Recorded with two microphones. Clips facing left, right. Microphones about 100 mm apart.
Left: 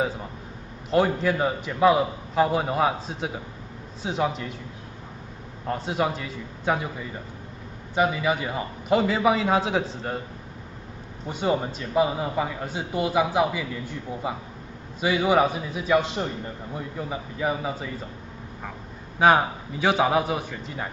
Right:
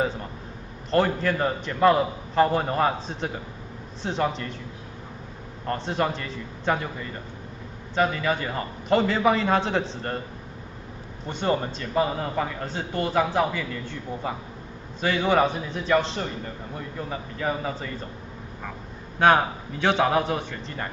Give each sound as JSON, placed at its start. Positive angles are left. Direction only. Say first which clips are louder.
{"t": 0.8, "sound": "a man's voice", "louder": "left 1 dB", "side_deg": 5}
{"t": 5.7, "sound": "a man's voice", "louder": "even", "side_deg": 5}
{"t": 11.2, "sound": "a man's voice", "louder": "even", "side_deg": 5}
{"t": 19.1, "sound": "a man's voice", "louder": "even", "side_deg": 5}